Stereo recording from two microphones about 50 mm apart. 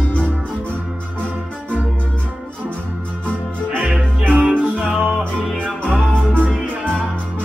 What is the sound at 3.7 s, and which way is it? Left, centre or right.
Music, right.